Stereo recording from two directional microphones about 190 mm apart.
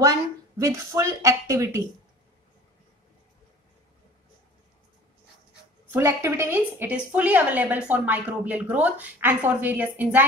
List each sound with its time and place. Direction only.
0.0 s a woman's voice: 15° right (ahead or behind)
5.9 s a woman's voice: 15° right (ahead or behind)